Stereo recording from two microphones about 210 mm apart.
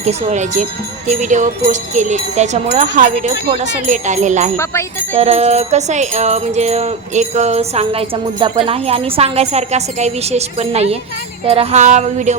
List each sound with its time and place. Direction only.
0.0 s music: 30° right (ahead or behind)